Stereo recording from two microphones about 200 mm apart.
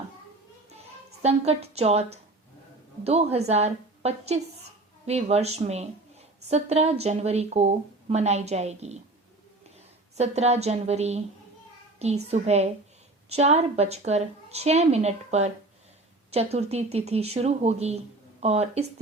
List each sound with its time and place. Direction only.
1.2 s speech: 30° right (ahead or behind)
10.2 s speech: 35° right (ahead or behind)